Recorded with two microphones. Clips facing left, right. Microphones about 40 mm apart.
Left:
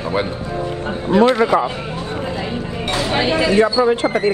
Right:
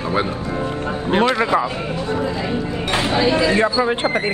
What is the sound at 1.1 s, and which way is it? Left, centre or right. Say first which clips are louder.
Speech: left 4 dB; right.